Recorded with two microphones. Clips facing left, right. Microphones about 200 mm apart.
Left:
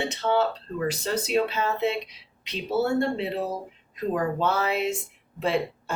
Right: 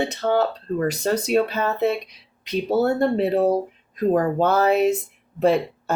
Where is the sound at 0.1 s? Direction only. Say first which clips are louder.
Right 3 dB; 45° right (ahead or behind).